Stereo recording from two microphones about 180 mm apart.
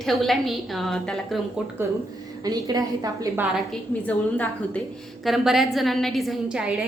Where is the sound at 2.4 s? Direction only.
20° right (ahead or behind).